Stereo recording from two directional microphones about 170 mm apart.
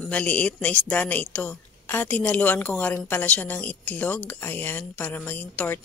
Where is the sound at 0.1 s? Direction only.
10° left (ahead or behind).